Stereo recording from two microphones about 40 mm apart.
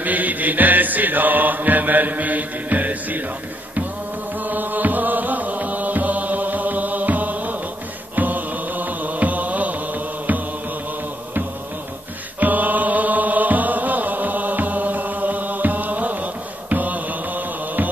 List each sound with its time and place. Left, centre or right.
0.0 s mantra: right
4.4 s music: right
12.4 s mantra: right